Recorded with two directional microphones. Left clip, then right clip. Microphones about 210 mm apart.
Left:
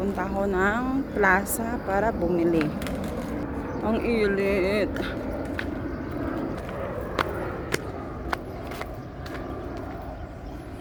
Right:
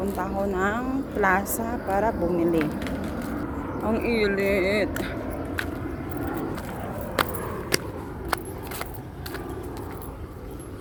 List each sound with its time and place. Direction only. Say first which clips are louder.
0.2 s a woman's voice: left 1 dB; 15° left (ahead or behind)
2.6 s speech: even; 20° left (ahead or behind)
3.8 s speech: even; 5° left (ahead or behind)
7.2 s biting: right 2 dB; 50° right (ahead or behind)
7.7 s a sound: right 3 dB; 40° right (ahead or behind)